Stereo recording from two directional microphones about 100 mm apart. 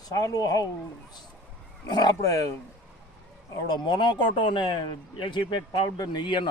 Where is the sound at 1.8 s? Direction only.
45° left (ahead or behind).